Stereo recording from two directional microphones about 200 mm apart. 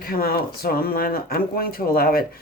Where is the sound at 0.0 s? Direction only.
50° left (ahead or behind).